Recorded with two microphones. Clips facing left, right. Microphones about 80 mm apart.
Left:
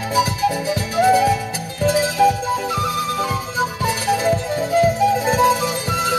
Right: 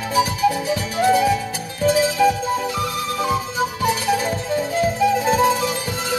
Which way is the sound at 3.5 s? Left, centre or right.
Left.